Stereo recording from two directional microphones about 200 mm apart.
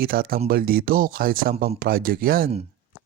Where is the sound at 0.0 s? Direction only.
50° right (ahead or behind).